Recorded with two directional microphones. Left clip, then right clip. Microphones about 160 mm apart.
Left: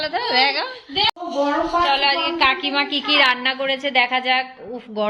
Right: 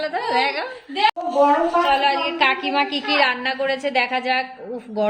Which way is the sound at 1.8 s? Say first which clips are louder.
Left 1 dB; 10° right (ahead or behind).